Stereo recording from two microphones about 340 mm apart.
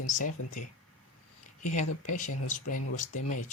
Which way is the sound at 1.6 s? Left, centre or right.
Left.